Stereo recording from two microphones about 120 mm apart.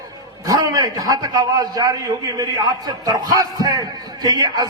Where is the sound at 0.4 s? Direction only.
30° right (ahead or behind).